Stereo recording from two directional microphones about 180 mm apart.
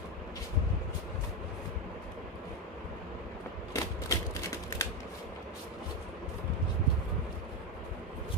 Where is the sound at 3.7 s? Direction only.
20° left (ahead or behind).